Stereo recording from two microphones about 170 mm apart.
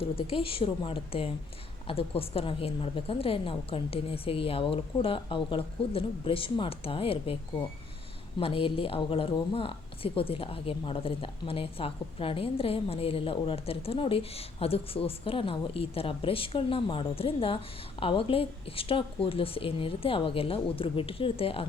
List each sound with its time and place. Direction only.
0.0 s a woman's voice: 35° left (ahead or behind)
8.4 s a woman's voice: 35° left (ahead or behind)